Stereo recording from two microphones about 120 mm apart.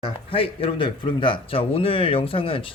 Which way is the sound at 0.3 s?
50° left (ahead or behind).